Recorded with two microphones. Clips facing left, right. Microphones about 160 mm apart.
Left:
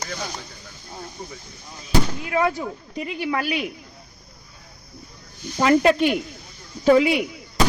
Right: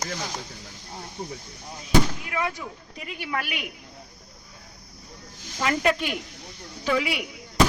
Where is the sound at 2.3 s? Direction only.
35° left (ahead or behind).